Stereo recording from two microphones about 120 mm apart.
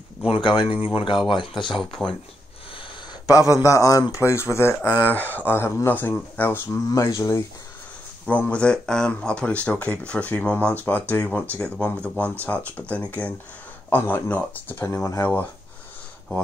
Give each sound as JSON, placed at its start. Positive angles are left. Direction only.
{"t": 0.3, "sound": "speech", "side_deg": 45}
{"t": 1.8, "sound": "speech", "side_deg": 0}
{"t": 3.3, "sound": "a man's voice", "side_deg": 25}
{"t": 8.3, "sound": "speech", "side_deg": 10}